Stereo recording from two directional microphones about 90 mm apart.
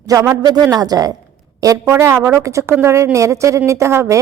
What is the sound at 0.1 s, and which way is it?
Speech, 45° right (ahead or behind).